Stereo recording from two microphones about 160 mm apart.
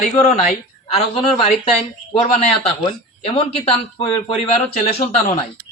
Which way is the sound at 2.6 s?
35° left (ahead or behind).